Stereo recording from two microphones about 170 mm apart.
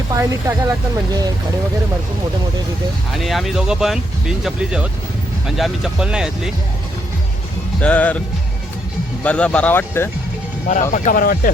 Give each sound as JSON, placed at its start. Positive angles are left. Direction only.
{"t": 0.1, "sound": "speech", "side_deg": -15}
{"t": 3.2, "sound": "speech", "side_deg": 0}
{"t": 7.8, "sound": "speech", "side_deg": 10}
{"t": 9.2, "sound": "speech", "side_deg": 5}
{"t": 10.9, "sound": "speech", "side_deg": 50}